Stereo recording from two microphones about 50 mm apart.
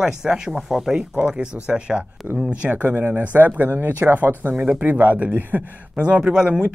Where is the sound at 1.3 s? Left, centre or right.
Centre.